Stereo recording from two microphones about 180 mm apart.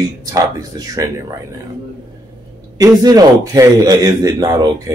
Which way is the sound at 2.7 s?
20° right (ahead or behind).